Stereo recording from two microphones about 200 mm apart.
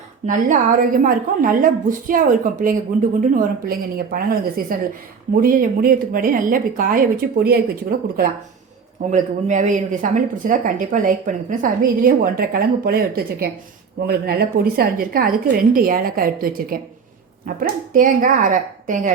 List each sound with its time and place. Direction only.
0.3 s speech: 40° right (ahead or behind)